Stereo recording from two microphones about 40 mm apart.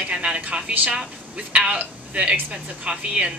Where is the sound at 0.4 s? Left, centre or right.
Right.